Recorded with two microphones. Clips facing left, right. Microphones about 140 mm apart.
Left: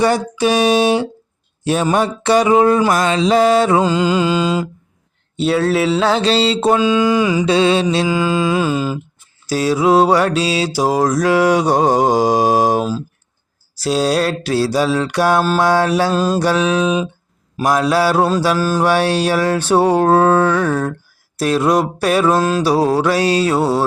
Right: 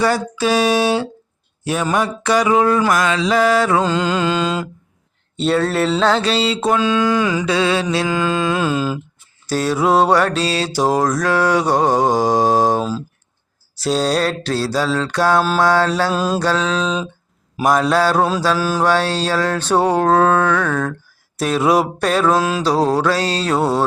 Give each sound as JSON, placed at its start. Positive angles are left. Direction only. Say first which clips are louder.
{"t": 0.0, "sound": "a sound", "louder": "left 2 dB", "side_deg": 20}
{"t": 3.8, "sound": "mantra", "louder": "left 3 dB", "side_deg": 5}
{"t": 6.2, "sound": "a sound", "louder": "left 3 dB", "side_deg": 30}
{"t": 6.7, "sound": "mantra", "louder": "left 2 dB", "side_deg": 10}
{"t": 7.4, "sound": "a sound", "louder": "left 4 dB", "side_deg": 25}
{"t": 8.0, "sound": "mantra", "louder": "left 2 dB", "side_deg": 5}
{"t": 16.1, "sound": "mantra", "louder": "left 3 dB", "side_deg": 0}
{"t": 16.4, "sound": "mantra", "louder": "left 3 dB", "side_deg": 15}
{"t": 17.6, "sound": "mantra", "louder": "even", "side_deg": 0}
{"t": 18.9, "sound": "mantra", "louder": "left 3 dB", "side_deg": 15}
{"t": 22.0, "sound": "mantra", "louder": "left 2 dB", "side_deg": 10}